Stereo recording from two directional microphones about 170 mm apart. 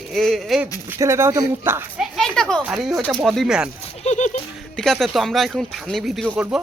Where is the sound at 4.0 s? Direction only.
45° left (ahead or behind).